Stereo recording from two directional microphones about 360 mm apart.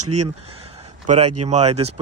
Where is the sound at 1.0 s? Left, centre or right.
Centre.